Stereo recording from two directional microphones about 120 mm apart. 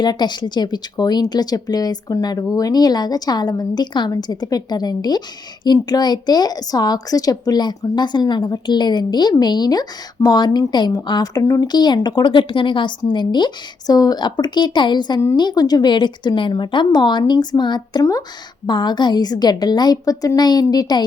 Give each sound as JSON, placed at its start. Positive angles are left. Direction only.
{"t": 0.0, "sound": "a woman's voice", "side_deg": 35}